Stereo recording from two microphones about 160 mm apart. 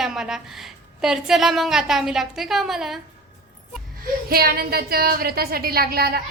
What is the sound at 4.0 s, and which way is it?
A woman's voice, 70° right (ahead or behind).